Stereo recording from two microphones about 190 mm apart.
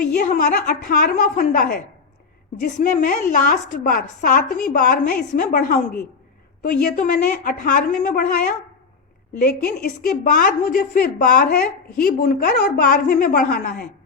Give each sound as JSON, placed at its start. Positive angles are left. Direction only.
{"t": 0.2, "sound": "a woman's voice", "side_deg": 50}